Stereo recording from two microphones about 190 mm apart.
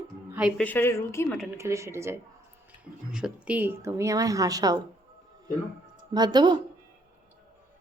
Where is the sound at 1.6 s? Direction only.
15° right (ahead or behind).